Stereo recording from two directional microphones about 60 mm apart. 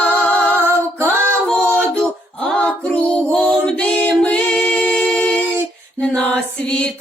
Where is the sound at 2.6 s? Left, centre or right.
Centre.